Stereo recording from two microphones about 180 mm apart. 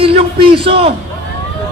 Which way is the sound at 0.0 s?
30° right (ahead or behind).